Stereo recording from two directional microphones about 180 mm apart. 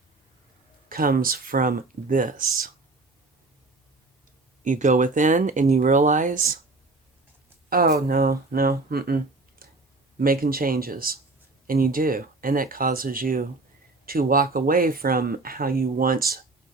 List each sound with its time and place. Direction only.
0.9 s speech: 55° right (ahead or behind)
4.6 s speech: 45° right (ahead or behind)
7.7 s speech: 55° right (ahead or behind)